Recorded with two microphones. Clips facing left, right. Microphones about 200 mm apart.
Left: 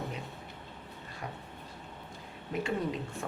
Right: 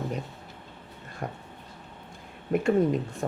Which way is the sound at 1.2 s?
50° right (ahead or behind).